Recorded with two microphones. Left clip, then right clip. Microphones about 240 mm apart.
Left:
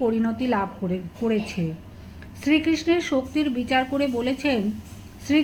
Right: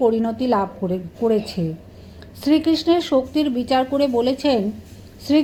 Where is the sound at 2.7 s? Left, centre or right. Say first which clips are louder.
Right 5 dB; centre.